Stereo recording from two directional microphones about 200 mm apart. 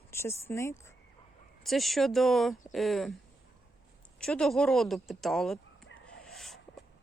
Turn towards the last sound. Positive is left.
turn(degrees=0)  # may be behind; listen again after turning